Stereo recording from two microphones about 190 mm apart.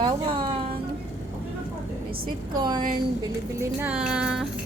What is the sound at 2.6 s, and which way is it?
Speech, 25° right (ahead or behind).